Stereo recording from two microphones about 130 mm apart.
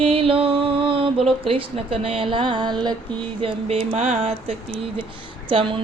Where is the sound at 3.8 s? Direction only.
75° right (ahead or behind).